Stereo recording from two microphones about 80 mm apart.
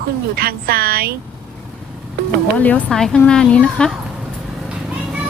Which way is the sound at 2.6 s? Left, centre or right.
Centre.